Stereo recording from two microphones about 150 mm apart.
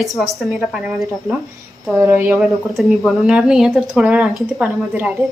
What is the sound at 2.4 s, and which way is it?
A woman's voice, centre (ahead or behind).